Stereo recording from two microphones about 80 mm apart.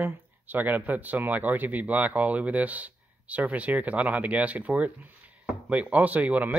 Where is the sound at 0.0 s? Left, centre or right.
Right.